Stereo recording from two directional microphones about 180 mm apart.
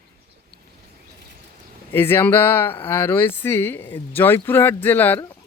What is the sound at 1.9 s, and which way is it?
Speech, 10° left (ahead or behind).